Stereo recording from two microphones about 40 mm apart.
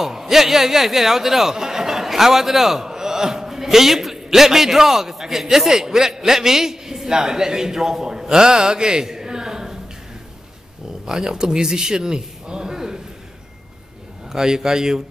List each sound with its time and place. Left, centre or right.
0.0 s a man's voice: centre
11.1 s speech: centre
14.3 s a man's voice: centre